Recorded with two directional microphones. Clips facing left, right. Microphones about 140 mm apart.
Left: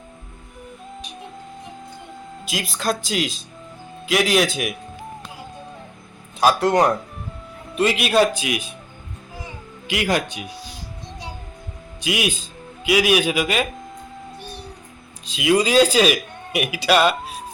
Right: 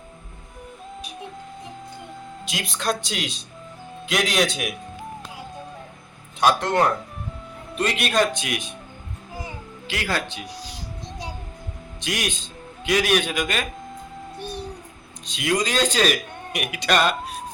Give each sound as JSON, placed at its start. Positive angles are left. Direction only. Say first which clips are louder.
{"t": 2.4, "sound": "speech", "louder": "left 3 dB", "side_deg": 0}
{"t": 6.4, "sound": "speech", "louder": "left 3 dB", "side_deg": 5}
{"t": 9.8, "sound": "speech", "louder": "left 5 dB", "side_deg": 15}
{"t": 11.9, "sound": "a man's voice", "louder": "left 5 dB", "side_deg": 10}
{"t": 15.3, "sound": "speech", "louder": "left 6 dB", "side_deg": 5}